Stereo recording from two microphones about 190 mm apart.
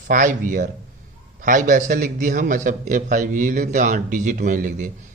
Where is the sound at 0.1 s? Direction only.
45° right (ahead or behind).